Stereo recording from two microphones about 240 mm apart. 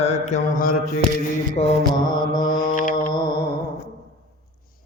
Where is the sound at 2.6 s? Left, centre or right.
Left.